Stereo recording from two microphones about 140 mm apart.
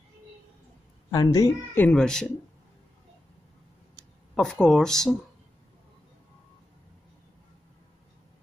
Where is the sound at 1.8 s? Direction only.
5° left (ahead or behind).